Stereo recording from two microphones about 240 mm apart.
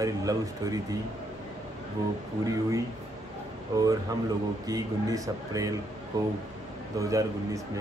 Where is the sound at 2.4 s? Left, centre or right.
Centre.